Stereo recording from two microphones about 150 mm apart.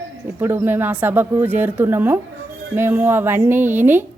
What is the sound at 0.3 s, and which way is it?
A woman's voice, 15° right (ahead or behind).